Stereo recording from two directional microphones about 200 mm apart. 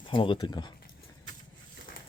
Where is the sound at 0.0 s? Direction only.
25° left (ahead or behind).